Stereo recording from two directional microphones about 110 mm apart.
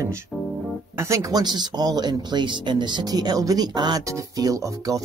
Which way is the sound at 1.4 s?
40° right (ahead or behind).